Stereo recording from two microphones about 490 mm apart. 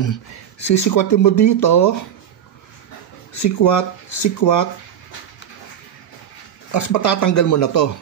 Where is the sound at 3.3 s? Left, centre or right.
Left.